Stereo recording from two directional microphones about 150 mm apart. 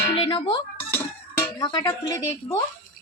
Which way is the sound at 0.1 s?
35° left (ahead or behind).